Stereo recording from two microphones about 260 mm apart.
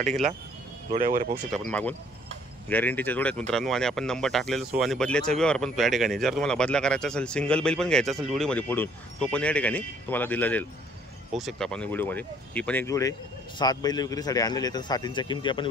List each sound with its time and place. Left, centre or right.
0.9 s speech: right
1.5 s speech: centre